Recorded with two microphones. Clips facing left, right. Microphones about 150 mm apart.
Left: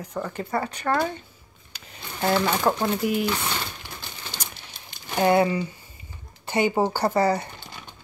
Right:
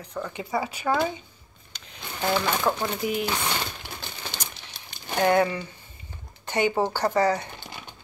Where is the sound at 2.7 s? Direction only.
15° left (ahead or behind).